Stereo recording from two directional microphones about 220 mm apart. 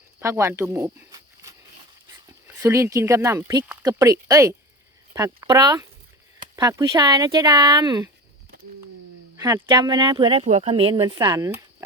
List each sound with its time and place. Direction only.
0.2 s speech: 15° right (ahead or behind)
9.6 s speech: 20° right (ahead or behind)